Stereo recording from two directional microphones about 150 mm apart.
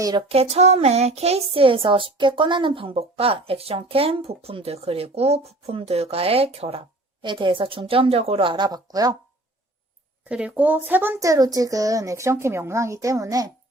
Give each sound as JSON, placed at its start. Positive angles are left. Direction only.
{"t": 0.0, "sound": "speech", "side_deg": -30}
{"t": 0.3, "sound": "speech", "side_deg": -45}
{"t": 10.2, "sound": "speech", "side_deg": -5}